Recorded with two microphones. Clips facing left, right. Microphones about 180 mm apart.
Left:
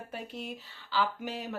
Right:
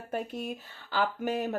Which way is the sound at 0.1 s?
50° right (ahead or behind).